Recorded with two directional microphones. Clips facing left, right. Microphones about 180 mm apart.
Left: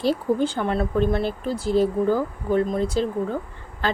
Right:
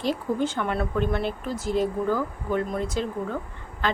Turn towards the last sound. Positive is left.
turn(degrees=35)  # may be behind; listen again after turning